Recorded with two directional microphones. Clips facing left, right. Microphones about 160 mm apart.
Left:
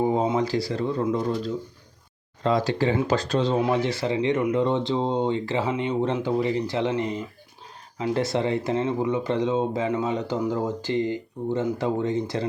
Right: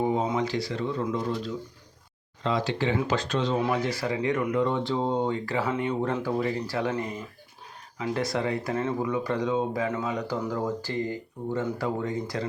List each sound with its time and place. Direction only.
0.3 s speech: 35° left (ahead or behind)